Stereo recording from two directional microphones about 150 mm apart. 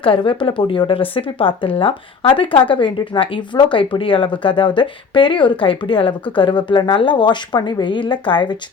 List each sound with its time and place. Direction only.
0.0 s speech: 35° left (ahead or behind)